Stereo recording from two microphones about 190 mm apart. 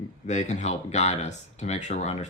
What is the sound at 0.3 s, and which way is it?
Speech, 40° left (ahead or behind).